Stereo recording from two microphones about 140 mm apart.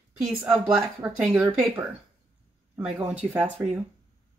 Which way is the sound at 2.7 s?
15° right (ahead or behind).